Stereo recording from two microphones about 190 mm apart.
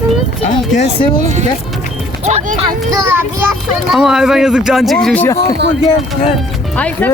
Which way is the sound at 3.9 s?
Centre (ahead or behind).